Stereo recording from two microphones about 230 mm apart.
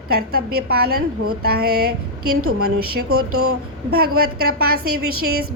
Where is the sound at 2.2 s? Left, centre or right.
Right.